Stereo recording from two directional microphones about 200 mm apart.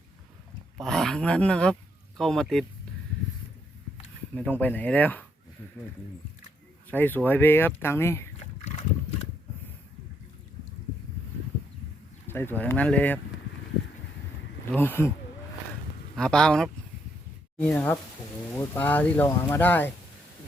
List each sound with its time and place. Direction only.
0.8 s speech: centre (ahead or behind)
4.4 s speech: 10° left (ahead or behind)
6.9 s speech: 10° left (ahead or behind)
8.4 s a sound: 35° left (ahead or behind)
12.3 s speech: 10° left (ahead or behind)
14.7 s speech: 10° left (ahead or behind)
16.1 s speech: 5° left (ahead or behind)